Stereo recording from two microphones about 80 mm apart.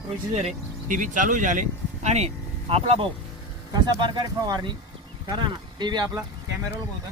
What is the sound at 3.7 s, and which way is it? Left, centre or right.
Speech, right.